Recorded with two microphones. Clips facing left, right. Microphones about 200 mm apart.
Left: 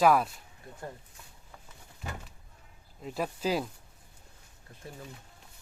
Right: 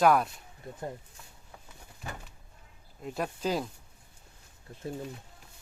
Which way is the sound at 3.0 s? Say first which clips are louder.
Even; centre (ahead or behind).